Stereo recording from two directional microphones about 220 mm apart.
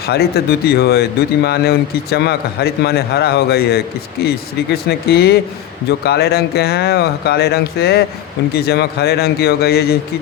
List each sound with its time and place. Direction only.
0.0 s a man's voice: 45° left (ahead or behind)